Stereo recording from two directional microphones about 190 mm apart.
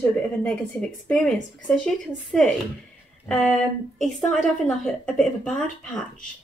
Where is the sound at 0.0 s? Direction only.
10° left (ahead or behind).